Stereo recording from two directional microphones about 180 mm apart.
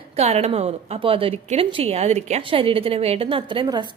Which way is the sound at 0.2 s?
35° right (ahead or behind).